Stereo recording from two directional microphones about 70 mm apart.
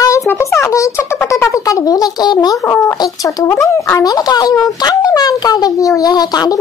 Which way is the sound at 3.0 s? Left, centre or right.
Left.